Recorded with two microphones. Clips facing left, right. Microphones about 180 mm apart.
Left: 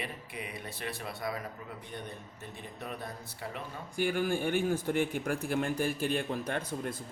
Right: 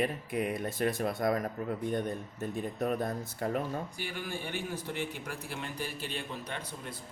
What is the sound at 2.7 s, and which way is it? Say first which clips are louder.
Speech: right 9 dB; 45° right (ahead or behind).